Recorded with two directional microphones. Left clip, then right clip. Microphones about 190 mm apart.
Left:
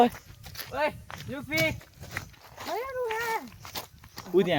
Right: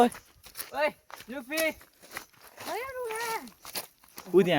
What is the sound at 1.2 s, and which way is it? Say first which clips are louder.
Speech: left 2 dB; 65° right (ahead or behind).